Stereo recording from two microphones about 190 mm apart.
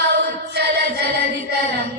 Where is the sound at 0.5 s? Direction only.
60° right (ahead or behind).